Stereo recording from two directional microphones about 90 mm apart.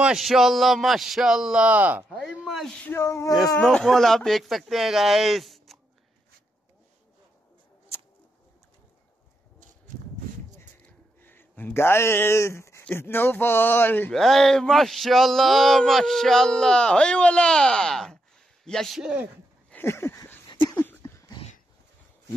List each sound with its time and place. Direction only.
0.0 s male singing: 5° right (ahead or behind)
2.4 s a sound: centre (ahead or behind)
3.0 s speech: 35° left (ahead or behind)
3.6 s male singing: 5° left (ahead or behind)
11.1 s speech: 25° left (ahead or behind)
14.1 s male singing: 5° left (ahead or behind)
19.7 s a sound: 25° left (ahead or behind)